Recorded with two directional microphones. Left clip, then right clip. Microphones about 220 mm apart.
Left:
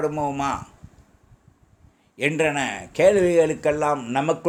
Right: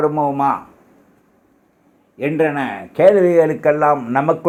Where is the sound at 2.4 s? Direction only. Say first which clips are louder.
Right 7 dB; 25° left (ahead or behind).